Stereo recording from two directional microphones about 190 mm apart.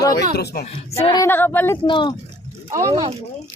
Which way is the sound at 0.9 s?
30° left (ahead or behind).